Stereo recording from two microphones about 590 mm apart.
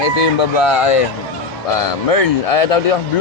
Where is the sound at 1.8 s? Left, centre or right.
Left.